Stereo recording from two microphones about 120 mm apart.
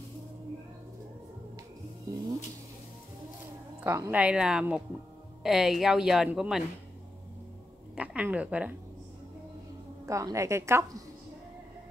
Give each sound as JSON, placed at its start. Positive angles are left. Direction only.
{"t": 3.8, "sound": "a woman's voice", "side_deg": -15}
{"t": 7.9, "sound": "a woman's voice", "side_deg": -10}
{"t": 10.0, "sound": "a woman's voice", "side_deg": -25}